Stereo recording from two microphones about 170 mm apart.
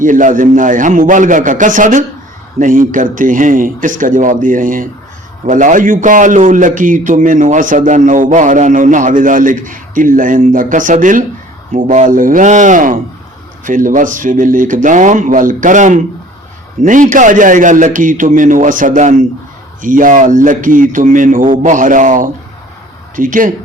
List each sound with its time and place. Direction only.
0.0 s a man's voice: 50° right (ahead or behind)